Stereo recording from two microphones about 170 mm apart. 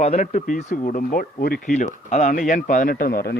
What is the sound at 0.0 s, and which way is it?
Speech, 45° left (ahead or behind).